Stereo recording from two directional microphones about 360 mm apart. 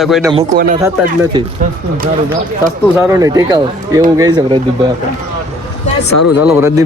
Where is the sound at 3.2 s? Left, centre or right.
Centre.